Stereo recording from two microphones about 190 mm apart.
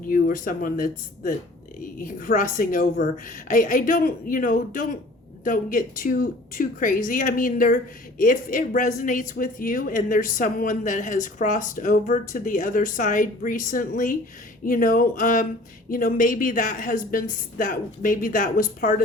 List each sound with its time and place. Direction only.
0.1 s a woman's voice: 45° left (ahead or behind)